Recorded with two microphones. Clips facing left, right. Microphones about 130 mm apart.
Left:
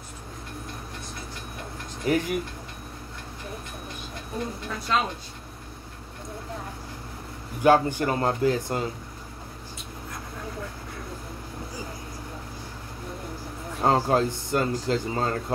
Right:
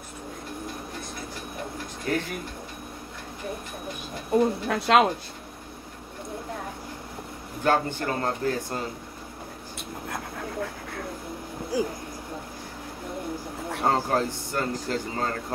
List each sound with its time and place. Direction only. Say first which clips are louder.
2.1 s speech: left 4 dB; 10° left (ahead or behind)
4.4 s a woman's voice: right 9 dB; 70° right (ahead or behind)
7.6 s speech: left 5 dB; 15° left (ahead or behind)
10.0 s dog: right 3 dB; 65° right (ahead or behind)
11.7 s a woman's voice: right 14 dB; 75° right (ahead or behind)
13.7 s speech: left 3 dB; 20° left (ahead or behind)